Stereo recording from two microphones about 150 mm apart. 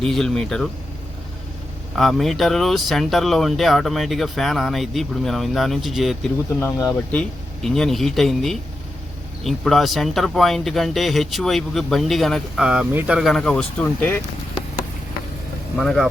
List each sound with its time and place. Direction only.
0.0 s speech: 5° left (ahead or behind)
2.0 s speech: centre (ahead or behind)
6.6 s speech: 15° left (ahead or behind)
7.2 s speech: 5° left (ahead or behind)
15.8 s speech: 5° left (ahead or behind)